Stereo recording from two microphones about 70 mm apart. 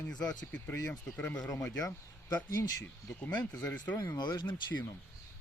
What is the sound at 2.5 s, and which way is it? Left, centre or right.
Speech, left.